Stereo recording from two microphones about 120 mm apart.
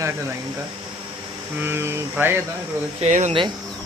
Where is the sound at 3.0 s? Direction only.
75° right (ahead or behind).